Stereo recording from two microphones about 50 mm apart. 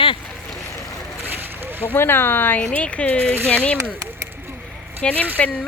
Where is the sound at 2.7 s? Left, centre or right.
Left.